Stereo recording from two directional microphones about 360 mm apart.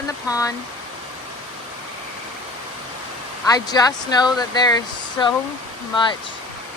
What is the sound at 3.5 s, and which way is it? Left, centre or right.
Speech, centre.